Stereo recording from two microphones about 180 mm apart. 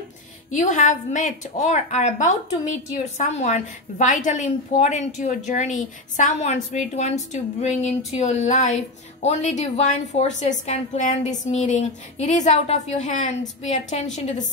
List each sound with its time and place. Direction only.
0.5 s a woman's voice: 45° left (ahead or behind)